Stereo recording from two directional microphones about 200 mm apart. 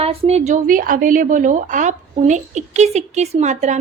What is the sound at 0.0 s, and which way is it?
Speech, 30° right (ahead or behind).